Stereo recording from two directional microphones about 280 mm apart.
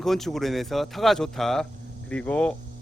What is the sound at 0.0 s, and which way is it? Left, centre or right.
Speech, centre.